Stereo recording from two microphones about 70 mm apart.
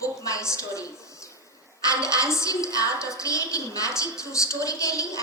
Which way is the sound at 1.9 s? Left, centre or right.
Left.